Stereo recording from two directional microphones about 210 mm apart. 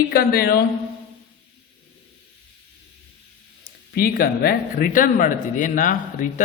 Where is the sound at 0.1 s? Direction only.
45° left (ahead or behind).